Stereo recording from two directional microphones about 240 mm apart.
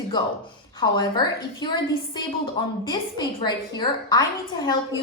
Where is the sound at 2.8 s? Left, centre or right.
Centre.